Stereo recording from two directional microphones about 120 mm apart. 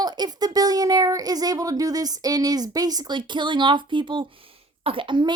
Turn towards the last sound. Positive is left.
turn(degrees=-40)  # may be behind; listen again after turning